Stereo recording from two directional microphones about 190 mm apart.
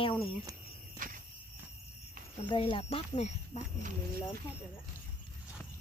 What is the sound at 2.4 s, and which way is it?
Speech, 25° left (ahead or behind).